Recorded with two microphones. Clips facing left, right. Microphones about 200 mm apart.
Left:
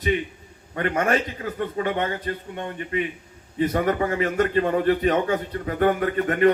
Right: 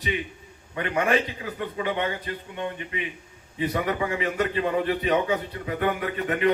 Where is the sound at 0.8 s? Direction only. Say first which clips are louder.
Left 1 dB; 45° left (ahead or behind).